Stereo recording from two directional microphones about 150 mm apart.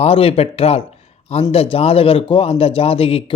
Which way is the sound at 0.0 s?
40° left (ahead or behind).